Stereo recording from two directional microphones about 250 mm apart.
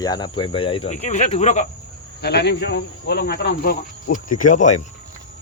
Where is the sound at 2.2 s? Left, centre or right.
Left.